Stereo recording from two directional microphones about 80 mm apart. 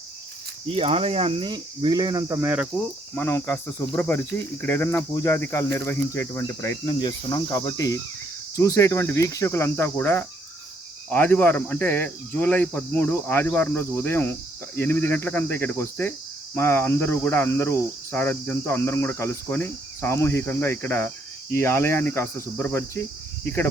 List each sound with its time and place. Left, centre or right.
1.4 s speech: right
2.4 s cricket: right
3.2 s cricket: left
3.5 s cricket: centre
6.8 s cricket: left